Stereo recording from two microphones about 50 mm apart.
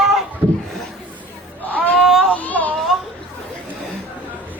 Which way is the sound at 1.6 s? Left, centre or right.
Left.